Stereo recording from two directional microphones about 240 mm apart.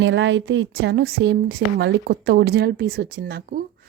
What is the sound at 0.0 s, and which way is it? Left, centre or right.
A woman's voice, right.